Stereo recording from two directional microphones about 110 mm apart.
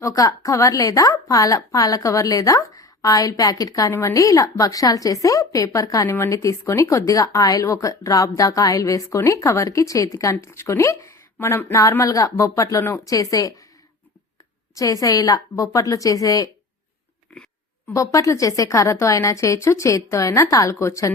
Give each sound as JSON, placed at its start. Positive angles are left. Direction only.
{"t": 0.0, "sound": "a woman's voice", "side_deg": 30}
{"t": 14.8, "sound": "a woman's voice", "side_deg": 30}
{"t": 17.9, "sound": "speech", "side_deg": 30}